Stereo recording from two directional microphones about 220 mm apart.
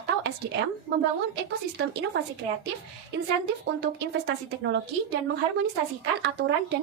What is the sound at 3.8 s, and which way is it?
Speech, 55° right (ahead or behind).